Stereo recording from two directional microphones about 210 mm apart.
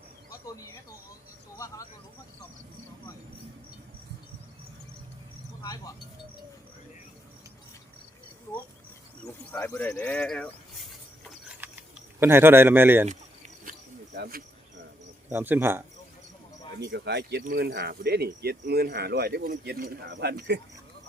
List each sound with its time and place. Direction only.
0.4 s speech: 15° left (ahead or behind)
5.6 s speech: 15° left (ahead or behind)
9.2 s speech: 10° left (ahead or behind)
11.3 s a sound: 5° right (ahead or behind)
12.2 s speech: 10° right (ahead or behind)
13.1 s cricket: 35° right (ahead or behind)
14.2 s speech: 45° right (ahead or behind)
15.3 s speech: 10° right (ahead or behind)
16.9 s speech: 55° right (ahead or behind)